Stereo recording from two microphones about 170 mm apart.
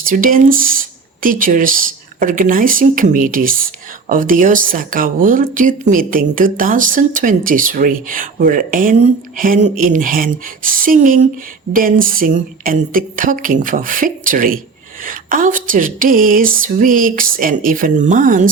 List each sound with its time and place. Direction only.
0.0 s speech: 55° right (ahead or behind)